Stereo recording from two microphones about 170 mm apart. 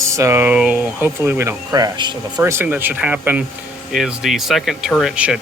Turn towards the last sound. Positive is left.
turn(degrees=-5)  # may be behind; listen again after turning